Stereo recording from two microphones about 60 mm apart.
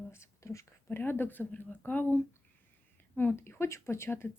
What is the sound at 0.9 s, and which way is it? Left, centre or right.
Speech, left.